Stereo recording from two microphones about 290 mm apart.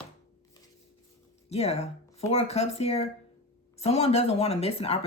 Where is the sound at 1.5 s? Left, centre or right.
Left.